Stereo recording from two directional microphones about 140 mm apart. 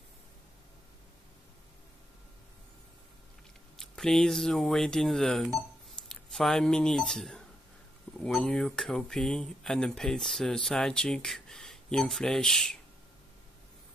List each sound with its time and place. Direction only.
3.7 s speech: 5° left (ahead or behind)